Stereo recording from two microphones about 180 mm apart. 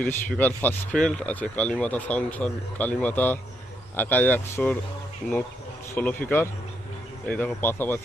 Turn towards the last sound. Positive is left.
turn(degrees=10)  # may be behind; listen again after turning